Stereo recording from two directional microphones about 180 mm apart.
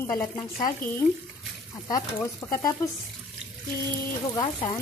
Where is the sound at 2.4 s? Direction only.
15° left (ahead or behind).